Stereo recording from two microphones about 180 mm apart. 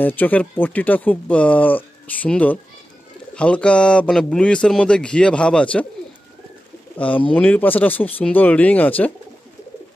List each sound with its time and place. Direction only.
0.0 s speech: 10° left (ahead or behind)
7.0 s speech: 10° left (ahead or behind)